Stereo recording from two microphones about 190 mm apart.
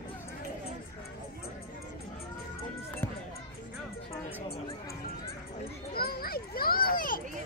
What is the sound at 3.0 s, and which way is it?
Music, 10° left (ahead or behind).